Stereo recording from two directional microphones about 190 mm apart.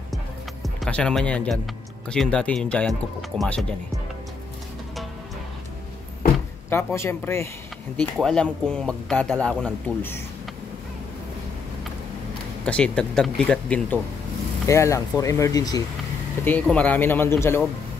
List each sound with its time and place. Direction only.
0.1 s music: centre (ahead or behind)
2.0 s speech: 5° left (ahead or behind)
6.7 s speech: 15° left (ahead or behind)
8.0 s speech: 5° left (ahead or behind)
12.6 s speech: 5° left (ahead or behind)
16.6 s speech: 5° left (ahead or behind)